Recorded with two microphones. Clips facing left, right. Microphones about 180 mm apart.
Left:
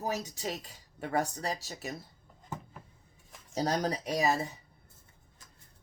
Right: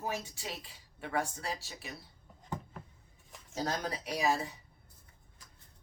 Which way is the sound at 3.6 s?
40° left (ahead or behind).